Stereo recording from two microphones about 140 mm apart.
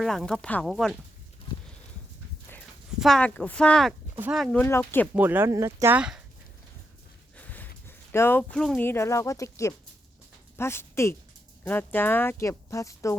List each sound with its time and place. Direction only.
0.0 s speech: centre (ahead or behind)
3.0 s speech: 5° left (ahead or behind)
4.5 s speech: 15° left (ahead or behind)
5.1 s speech: 15° right (ahead or behind)
6.0 s speech: 5° right (ahead or behind)
7.3 s a sound: 10° left (ahead or behind)
8.8 s speech: 15° left (ahead or behind)